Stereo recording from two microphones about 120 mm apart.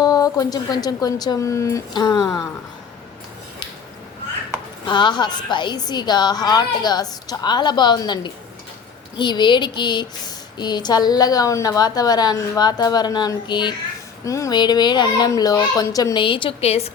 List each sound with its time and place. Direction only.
0.0 s a woman's voice: 30° left (ahead or behind)
4.9 s a woman's voice: 40° left (ahead or behind)
14.3 s speech: 25° left (ahead or behind)
14.5 s a woman's voice: 35° left (ahead or behind)
16.1 s a woman's voice: 45° left (ahead or behind); by 16.9 s 60° left (ahead or behind)